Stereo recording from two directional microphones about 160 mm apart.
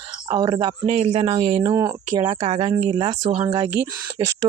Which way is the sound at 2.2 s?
40° right (ahead or behind).